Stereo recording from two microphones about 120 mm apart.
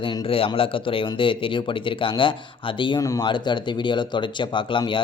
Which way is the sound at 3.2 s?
40° left (ahead or behind).